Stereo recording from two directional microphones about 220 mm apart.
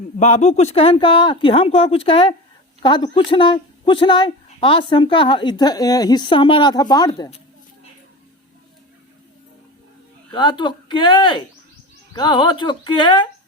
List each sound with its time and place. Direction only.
0.2 s speech: 30° left (ahead or behind)
10.3 s speech: 20° left (ahead or behind)